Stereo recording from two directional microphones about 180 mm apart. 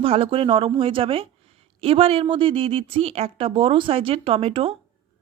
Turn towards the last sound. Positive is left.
turn(degrees=-30)  # may be behind; listen again after turning